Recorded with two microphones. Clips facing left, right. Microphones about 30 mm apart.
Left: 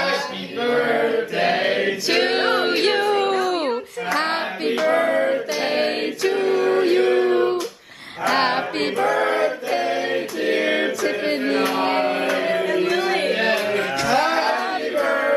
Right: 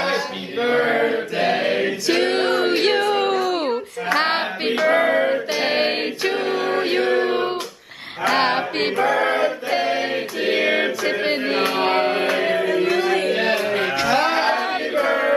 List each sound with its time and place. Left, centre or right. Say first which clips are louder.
0.6 s a sound: right 1 dB; centre
4.1 s music: right 3 dB; right
7.0 s music: left 1 dB; centre
7.2 s a sound: left 3 dB; right
8.3 s music: right 1 dB; centre
8.7 s choir: right 1 dB; centre
10.7 s music: right 1 dB; centre
12.4 s music: right 1 dB; centre
12.9 s a sound: right 1 dB; centre
13.3 s music: even; centre
13.7 s music: right 1 dB; centre